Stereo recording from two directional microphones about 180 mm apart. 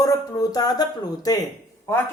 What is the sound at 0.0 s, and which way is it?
A man's voice, 20° left (ahead or behind).